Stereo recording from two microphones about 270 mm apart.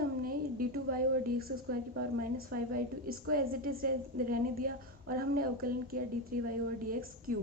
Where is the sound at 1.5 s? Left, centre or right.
Right.